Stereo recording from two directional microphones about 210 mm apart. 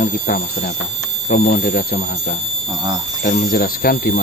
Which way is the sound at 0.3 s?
45° left (ahead or behind).